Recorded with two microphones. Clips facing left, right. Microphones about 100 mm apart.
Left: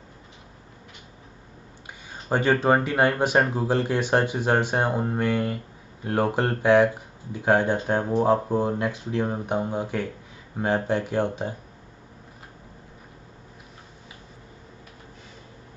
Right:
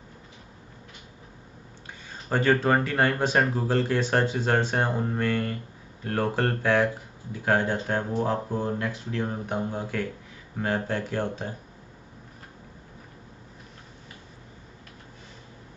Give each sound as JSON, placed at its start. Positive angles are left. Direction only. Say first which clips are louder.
{"t": 2.2, "sound": "speech", "louder": "left 2 dB", "side_deg": 20}